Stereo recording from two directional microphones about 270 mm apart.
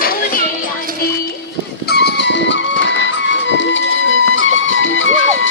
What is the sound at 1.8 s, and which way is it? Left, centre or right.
Music, left.